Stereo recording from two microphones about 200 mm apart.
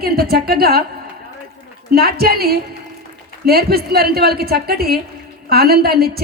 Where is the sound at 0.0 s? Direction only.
50° right (ahead or behind).